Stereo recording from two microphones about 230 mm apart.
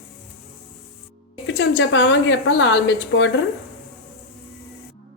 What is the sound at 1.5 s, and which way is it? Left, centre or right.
A woman's voice, left.